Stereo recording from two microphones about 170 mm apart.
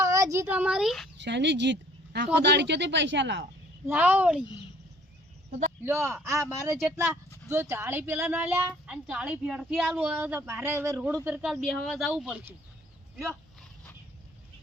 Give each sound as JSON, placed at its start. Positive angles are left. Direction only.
{"t": 0.0, "sound": "a child's voice", "side_deg": -20}
{"t": 1.2, "sound": "speech", "side_deg": -90}
{"t": 3.8, "sound": "a woman's voice", "side_deg": -10}
{"t": 5.5, "sound": "a sound", "side_deg": -40}
{"t": 5.8, "sound": "a woman's voice", "side_deg": -15}